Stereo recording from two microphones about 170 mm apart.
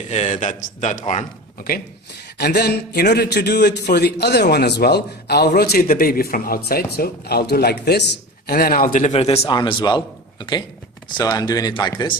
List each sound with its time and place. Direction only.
0.1 s a man's voice: 45° left (ahead or behind)
2.4 s a man's voice: 70° left (ahead or behind); by 10.0 s 25° left (ahead or behind)
11.2 s speech: 20° left (ahead or behind)